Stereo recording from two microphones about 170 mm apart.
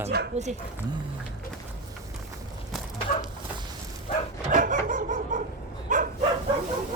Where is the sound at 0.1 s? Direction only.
65° right (ahead or behind).